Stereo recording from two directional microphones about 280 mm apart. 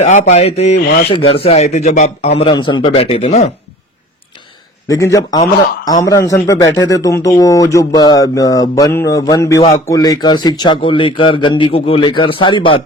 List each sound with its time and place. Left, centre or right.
0.0 s a man's voice: left
4.9 s a man's voice: centre